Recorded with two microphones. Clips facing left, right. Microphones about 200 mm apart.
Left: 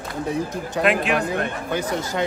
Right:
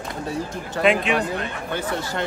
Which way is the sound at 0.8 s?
Centre (ahead or behind).